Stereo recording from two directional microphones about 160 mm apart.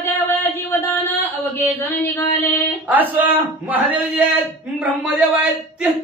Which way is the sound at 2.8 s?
10° right (ahead or behind).